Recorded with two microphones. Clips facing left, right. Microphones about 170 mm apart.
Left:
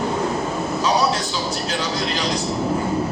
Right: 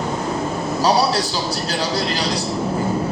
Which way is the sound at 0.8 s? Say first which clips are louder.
Right 3 dB; 35° right (ahead or behind).